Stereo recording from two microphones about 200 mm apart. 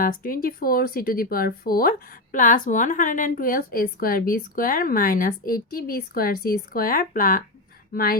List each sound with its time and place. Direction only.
0.0 s speech: 45° left (ahead or behind)